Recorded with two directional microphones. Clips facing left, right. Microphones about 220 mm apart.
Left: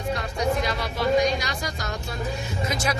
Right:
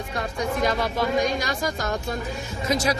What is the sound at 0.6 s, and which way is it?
Speech, 45° right (ahead or behind).